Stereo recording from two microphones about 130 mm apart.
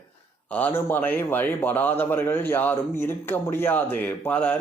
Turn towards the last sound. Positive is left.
turn(degrees=10)  # may be behind; listen again after turning